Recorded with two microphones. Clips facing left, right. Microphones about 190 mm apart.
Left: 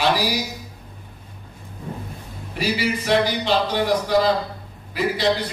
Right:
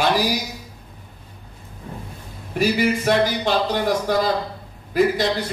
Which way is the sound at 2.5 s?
50° right (ahead or behind).